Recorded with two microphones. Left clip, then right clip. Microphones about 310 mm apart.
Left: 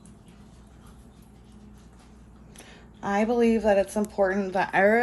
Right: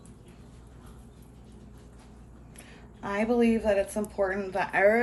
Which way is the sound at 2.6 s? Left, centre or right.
Left.